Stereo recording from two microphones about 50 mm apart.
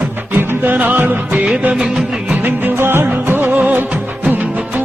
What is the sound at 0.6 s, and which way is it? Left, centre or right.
Music, right.